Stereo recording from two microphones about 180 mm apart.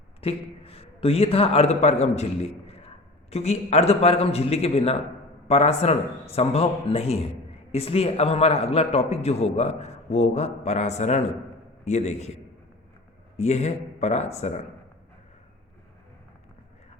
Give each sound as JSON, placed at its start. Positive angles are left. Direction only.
{"t": 0.2, "sound": "a man's voice", "side_deg": 30}
{"t": 13.3, "sound": "a man's voice", "side_deg": 35}